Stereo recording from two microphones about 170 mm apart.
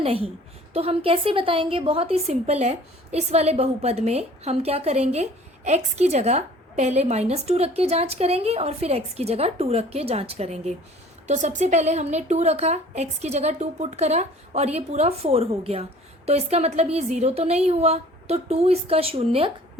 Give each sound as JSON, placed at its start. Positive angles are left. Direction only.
{"t": 0.0, "sound": "a woman's voice", "side_deg": -35}